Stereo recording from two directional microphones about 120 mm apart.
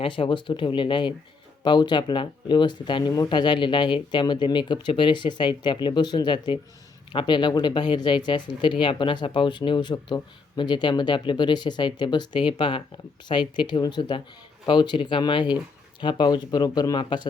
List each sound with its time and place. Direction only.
0.0 s speech: 45° left (ahead or behind)